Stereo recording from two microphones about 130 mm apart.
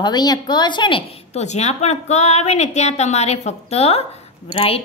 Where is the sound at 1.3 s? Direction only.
55° left (ahead or behind).